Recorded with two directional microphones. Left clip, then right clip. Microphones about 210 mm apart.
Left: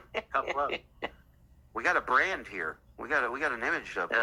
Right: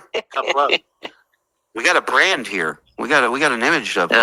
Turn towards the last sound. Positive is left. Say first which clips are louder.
# right 14 dB
turn(degrees=-40)  # may be behind; listen again after turning